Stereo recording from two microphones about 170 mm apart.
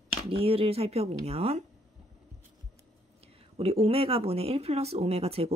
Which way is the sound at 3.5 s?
35° right (ahead or behind).